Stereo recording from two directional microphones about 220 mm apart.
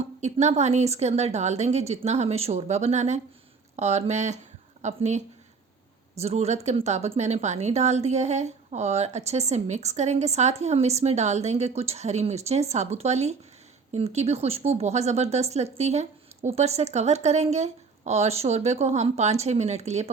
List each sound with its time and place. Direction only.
0.2 s a woman's voice: 30° right (ahead or behind)